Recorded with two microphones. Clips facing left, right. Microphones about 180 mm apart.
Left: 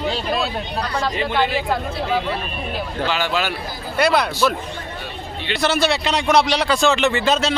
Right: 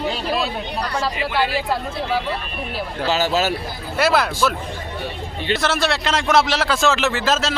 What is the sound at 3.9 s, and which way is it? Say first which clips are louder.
Speech: even; 5° right (ahead or behind).